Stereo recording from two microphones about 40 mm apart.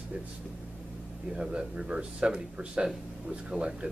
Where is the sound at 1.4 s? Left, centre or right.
Right.